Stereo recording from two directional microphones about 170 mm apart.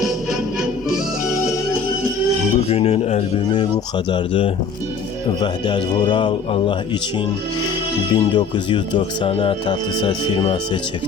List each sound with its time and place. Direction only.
2.6 s speech: 35° left (ahead or behind)
3.5 s speech: 25° left (ahead or behind)
8.1 s speech: 25° left (ahead or behind)